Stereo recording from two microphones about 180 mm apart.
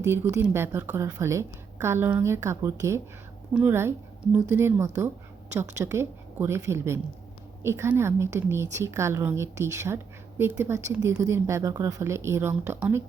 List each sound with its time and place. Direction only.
0.0 s a woman's voice: 15° right (ahead or behind)